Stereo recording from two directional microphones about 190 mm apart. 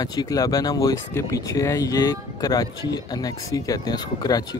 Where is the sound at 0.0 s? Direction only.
20° left (ahead or behind).